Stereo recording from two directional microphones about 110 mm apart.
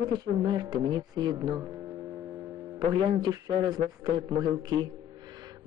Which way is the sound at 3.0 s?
45° right (ahead or behind).